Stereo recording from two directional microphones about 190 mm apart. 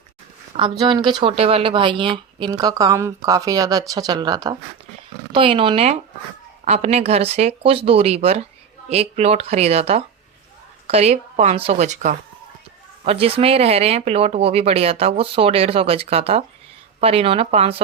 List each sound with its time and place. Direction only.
0.5 s speech: 25° right (ahead or behind)